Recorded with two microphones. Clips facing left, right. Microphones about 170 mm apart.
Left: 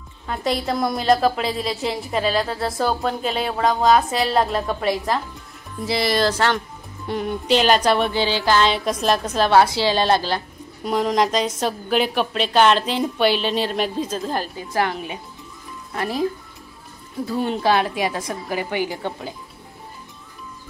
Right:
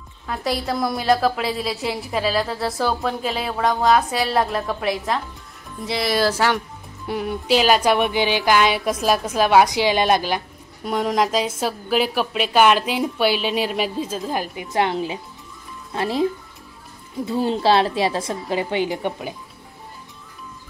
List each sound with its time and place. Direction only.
0.3 s a woman's voice: centre (ahead or behind)
10.8 s a woman's voice: centre (ahead or behind); by 16.3 s 25° right (ahead or behind)
17.3 s a woman's voice: 30° right (ahead or behind)